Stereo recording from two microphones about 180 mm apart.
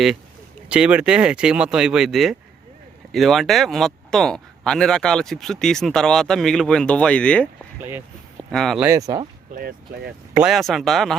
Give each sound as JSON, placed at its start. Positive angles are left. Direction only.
{"t": 0.7, "sound": "speech", "side_deg": -5}
{"t": 8.4, "sound": "speech", "side_deg": 0}
{"t": 8.8, "sound": "speech", "side_deg": -15}
{"t": 9.6, "sound": "speech", "side_deg": -55}
{"t": 10.3, "sound": "speech", "side_deg": 0}